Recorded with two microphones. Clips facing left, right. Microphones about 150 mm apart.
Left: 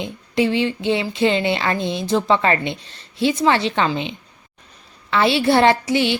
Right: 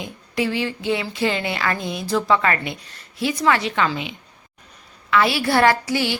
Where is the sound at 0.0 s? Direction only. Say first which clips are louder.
Left 4 dB; 25° left (ahead or behind).